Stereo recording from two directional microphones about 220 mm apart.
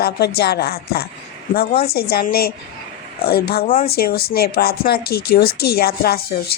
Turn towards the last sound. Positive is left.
turn(degrees=45)  # may be behind; listen again after turning